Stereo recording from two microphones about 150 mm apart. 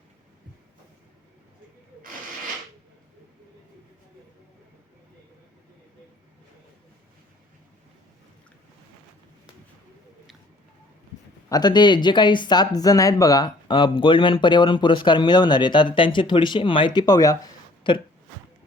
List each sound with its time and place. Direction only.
11.4 s speech: 25° left (ahead or behind)